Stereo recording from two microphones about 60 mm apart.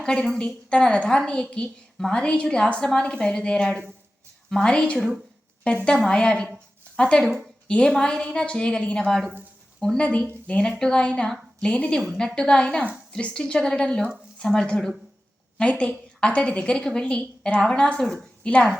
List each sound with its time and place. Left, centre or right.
0.0 s a woman's voice: centre
4.9 s a woman's voice: centre
5.7 s a woman's voice: centre